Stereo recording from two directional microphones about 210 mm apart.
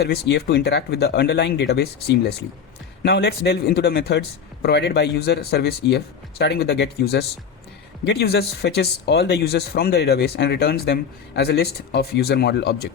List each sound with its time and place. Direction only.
0.0 s speech: 55° left (ahead or behind)